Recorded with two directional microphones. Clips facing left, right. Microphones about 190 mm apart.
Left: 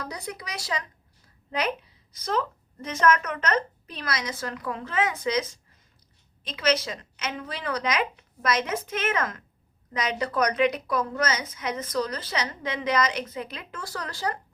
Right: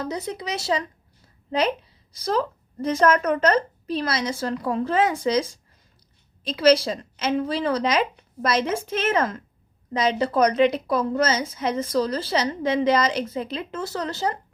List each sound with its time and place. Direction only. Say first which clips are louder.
0.0 s a woman's voice: right 7 dB; 25° right (ahead or behind)